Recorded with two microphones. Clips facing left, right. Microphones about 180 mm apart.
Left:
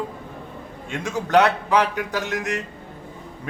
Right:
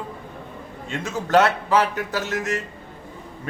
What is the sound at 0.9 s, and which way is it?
A man's voice, 15° left (ahead or behind).